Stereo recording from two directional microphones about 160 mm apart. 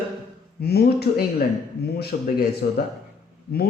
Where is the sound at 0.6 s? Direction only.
90° left.